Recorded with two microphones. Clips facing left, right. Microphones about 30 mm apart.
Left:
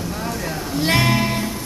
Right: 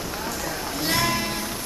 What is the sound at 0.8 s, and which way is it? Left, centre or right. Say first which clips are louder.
Music: left 6 dB; left.